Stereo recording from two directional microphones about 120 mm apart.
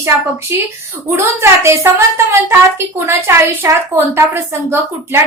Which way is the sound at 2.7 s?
20° right (ahead or behind).